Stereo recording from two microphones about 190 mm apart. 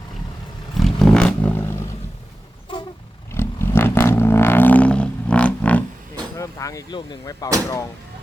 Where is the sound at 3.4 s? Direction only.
15° left (ahead or behind).